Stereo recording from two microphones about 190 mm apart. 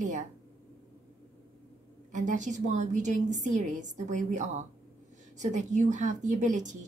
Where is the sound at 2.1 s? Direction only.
40° right (ahead or behind).